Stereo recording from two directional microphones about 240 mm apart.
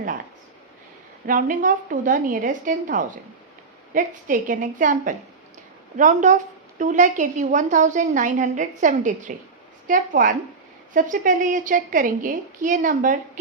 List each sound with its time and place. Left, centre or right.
1.3 s a woman's voice: right